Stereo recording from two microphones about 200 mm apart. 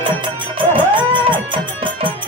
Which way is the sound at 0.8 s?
25° right (ahead or behind).